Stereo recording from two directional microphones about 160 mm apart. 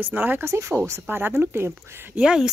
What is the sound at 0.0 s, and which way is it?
Speech, 10° right (ahead or behind).